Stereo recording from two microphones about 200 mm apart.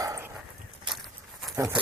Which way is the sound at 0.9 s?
Centre (ahead or behind).